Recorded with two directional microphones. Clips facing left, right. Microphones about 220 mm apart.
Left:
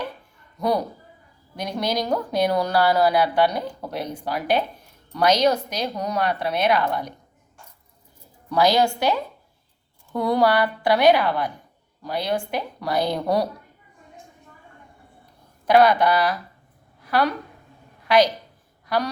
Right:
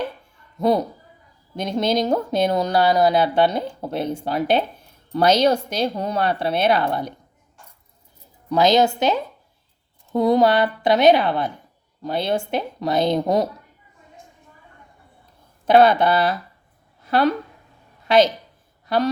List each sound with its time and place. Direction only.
0.6 s speech: 25° right (ahead or behind)
8.4 s speech: 20° right (ahead or behind)
15.6 s speech: 25° right (ahead or behind)
17.0 s a sound: 25° right (ahead or behind)
18.1 s speech: 25° right (ahead or behind)